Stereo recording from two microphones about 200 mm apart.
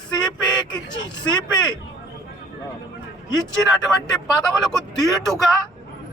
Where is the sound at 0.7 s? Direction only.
20° left (ahead or behind).